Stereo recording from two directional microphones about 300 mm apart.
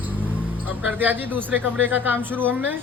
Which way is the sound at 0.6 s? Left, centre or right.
Centre.